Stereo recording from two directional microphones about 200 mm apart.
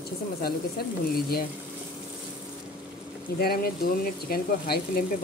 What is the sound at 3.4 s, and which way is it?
A woman's voice, 50° left (ahead or behind).